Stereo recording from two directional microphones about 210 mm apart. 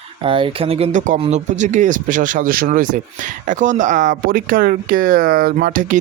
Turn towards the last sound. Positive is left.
turn(degrees=-40)  # may be behind; listen again after turning